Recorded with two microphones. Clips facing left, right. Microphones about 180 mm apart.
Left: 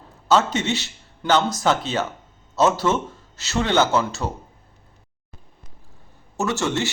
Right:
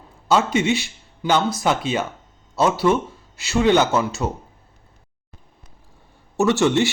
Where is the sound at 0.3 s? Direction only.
15° right (ahead or behind).